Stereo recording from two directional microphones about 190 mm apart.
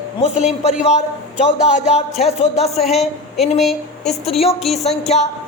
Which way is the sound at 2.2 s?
35° left (ahead or behind).